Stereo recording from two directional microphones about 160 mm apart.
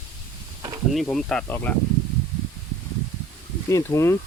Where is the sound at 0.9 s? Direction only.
Centre (ahead or behind).